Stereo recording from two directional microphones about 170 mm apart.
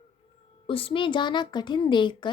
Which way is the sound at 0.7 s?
30° left (ahead or behind).